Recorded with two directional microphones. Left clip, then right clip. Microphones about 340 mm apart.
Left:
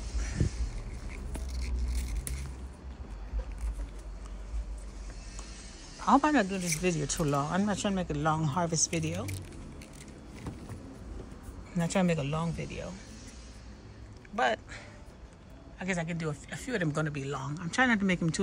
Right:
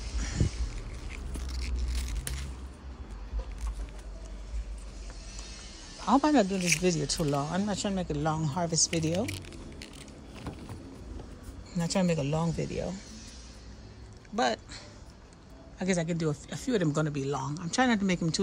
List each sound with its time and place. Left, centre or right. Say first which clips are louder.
6.0 s speech: even; centre
8.7 s speech: right 3 dB; right
9.1 s a sound: right 7 dB; centre
11.7 s speech: even; centre
14.3 s a sound: even; centre
15.8 s speech: right 4 dB; centre